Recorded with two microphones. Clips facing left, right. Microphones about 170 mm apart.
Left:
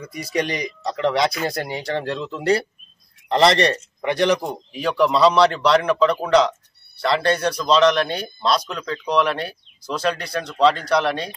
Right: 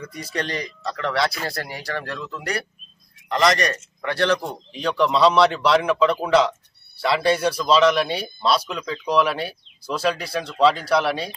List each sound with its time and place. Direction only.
0.0 s speech: 10° left (ahead or behind); by 3.7 s 30° left (ahead or behind)
4.0 s speech: 15° left (ahead or behind)
4.7 s speech: 5° left (ahead or behind)